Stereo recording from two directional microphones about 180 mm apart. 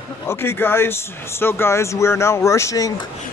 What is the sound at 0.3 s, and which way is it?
Speech, 15° left (ahead or behind).